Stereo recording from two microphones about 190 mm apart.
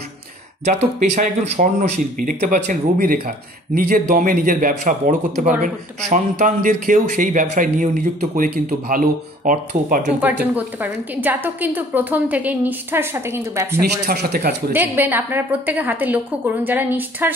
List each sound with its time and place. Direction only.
0.7 s speech: 35° right (ahead or behind)
10.2 s a woman's voice: 10° right (ahead or behind)
14.0 s speech: 55° right (ahead or behind)
14.7 s a woman's voice: 10° right (ahead or behind)